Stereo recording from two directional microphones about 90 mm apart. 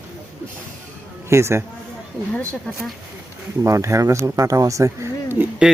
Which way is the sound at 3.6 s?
35° right (ahead or behind).